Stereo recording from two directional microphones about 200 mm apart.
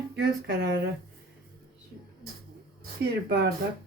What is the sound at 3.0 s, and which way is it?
Speech, 55° right (ahead or behind).